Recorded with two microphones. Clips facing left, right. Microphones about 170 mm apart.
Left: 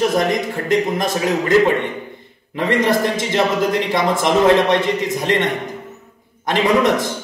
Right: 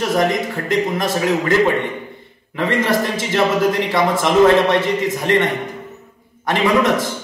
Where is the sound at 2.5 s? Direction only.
15° left (ahead or behind).